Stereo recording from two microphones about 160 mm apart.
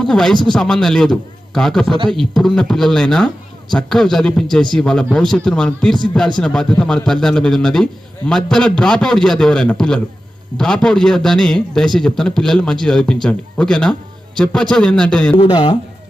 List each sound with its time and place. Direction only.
0.0 s a man's voice: 5° left (ahead or behind)
15.4 s speech: 30° left (ahead or behind)